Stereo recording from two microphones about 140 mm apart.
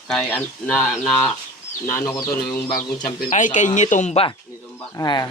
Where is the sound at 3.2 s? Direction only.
65° left (ahead or behind); by 4.3 s 50° left (ahead or behind).